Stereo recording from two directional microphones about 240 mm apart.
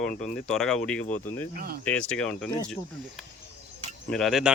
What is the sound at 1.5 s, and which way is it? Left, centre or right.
Speech, right.